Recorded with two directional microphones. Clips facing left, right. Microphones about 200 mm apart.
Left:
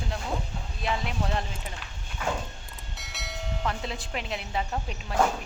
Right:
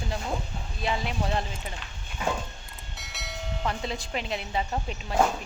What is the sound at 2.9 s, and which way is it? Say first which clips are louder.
Speech: even; centre (ahead or behind).